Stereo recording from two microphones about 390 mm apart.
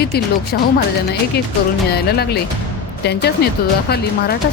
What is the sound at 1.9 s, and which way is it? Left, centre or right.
Speech, left.